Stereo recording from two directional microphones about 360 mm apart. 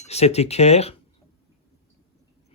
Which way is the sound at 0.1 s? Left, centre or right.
Centre.